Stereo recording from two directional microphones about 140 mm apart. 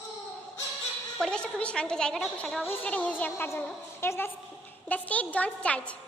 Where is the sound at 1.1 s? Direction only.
5° left (ahead or behind).